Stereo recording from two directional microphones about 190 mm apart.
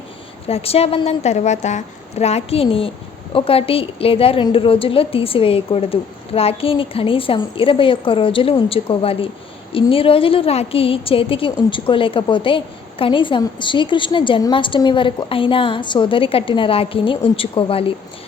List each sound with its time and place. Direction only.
0.4 s a woman's voice: 30° left (ahead or behind)